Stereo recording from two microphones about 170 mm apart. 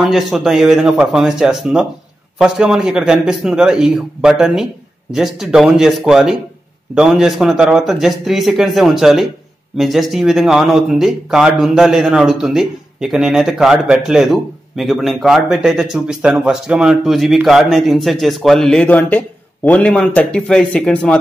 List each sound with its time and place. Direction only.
0.1 s speech: centre (ahead or behind)